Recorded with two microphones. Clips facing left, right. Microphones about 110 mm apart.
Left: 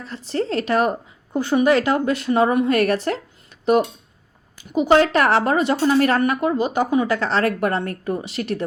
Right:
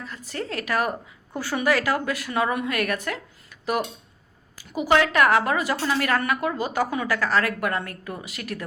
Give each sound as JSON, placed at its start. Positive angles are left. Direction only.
{"t": 0.0, "sound": "a woman's voice", "side_deg": 30}